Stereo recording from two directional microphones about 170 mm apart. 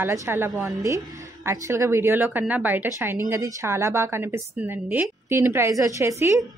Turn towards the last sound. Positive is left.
turn(degrees=-15)  # may be behind; listen again after turning